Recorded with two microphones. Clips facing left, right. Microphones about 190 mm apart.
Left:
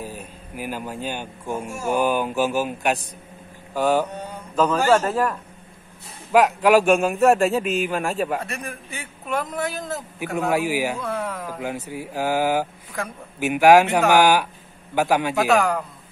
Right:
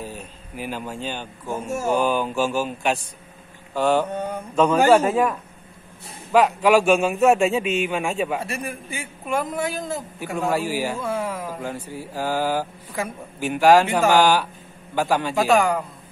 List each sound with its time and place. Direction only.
0.0 s a man's voice: 10° left (ahead or behind)
4.1 s mantra: 50° right (ahead or behind)
4.6 s a man's voice: 10° right (ahead or behind)
6.3 s a man's voice: 5° left (ahead or behind)
10.5 s speech: 15° left (ahead or behind)
11.0 s a sound: centre (ahead or behind)
11.6 s speech: 10° left (ahead or behind)
15.3 s a man's voice: centre (ahead or behind)